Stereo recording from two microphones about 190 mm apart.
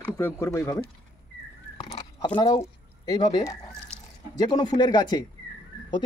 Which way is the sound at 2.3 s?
20° left (ahead or behind).